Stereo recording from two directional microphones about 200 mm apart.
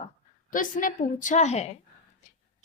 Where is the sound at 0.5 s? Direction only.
40° left (ahead or behind).